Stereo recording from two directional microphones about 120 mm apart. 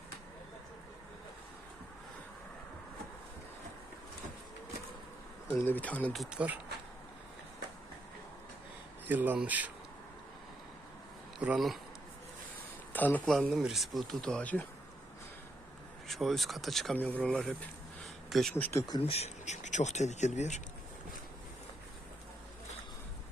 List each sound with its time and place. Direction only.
5.5 s speech: 20° left (ahead or behind)
6.1 s speech: 10° right (ahead or behind)
9.0 s speech: 15° right (ahead or behind)
11.4 s speech: centre (ahead or behind)
12.9 s speech: 15° left (ahead or behind)
13.3 s speech: centre (ahead or behind)
16.0 s speech: centre (ahead or behind)
17.0 s speech: 10° left (ahead or behind)
18.0 s a sound: centre (ahead or behind)
18.5 s speech: 20° left (ahead or behind)
19.0 s speech: 60° left (ahead or behind)